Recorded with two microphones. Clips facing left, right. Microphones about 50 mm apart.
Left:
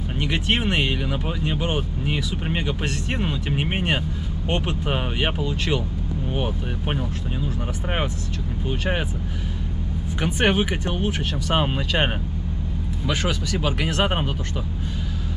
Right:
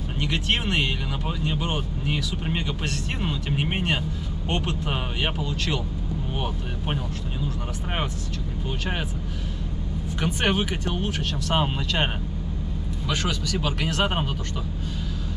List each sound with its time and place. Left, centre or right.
0.2 s speech: centre
8.6 s speech: centre
10.2 s speech: centre
13.1 s speech: centre